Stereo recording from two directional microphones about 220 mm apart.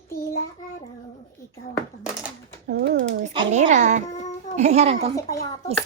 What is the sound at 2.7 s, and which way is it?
Speech, 50° right (ahead or behind).